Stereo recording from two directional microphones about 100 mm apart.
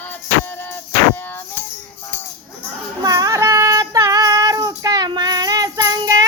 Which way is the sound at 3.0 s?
40° right (ahead or behind).